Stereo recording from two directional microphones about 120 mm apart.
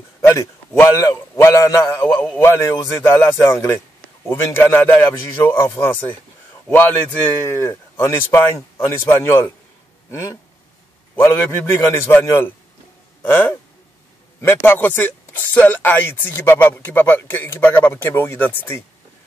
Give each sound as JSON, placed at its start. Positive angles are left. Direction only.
{"t": 0.2, "sound": "a man's voice", "side_deg": 20}